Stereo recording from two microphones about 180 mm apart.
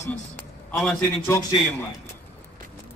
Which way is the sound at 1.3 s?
20° left (ahead or behind).